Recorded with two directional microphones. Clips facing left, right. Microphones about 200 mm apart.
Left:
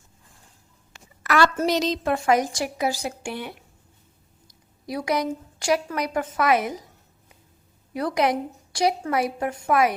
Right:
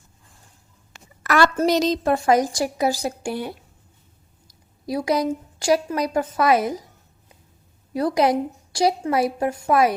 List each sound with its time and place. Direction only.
1.2 s a sound: 45° right (ahead or behind)
1.6 s a woman's voice: 40° right (ahead or behind)
4.9 s a woman's voice: 30° right (ahead or behind)
7.9 s a woman's voice: 30° right (ahead or behind)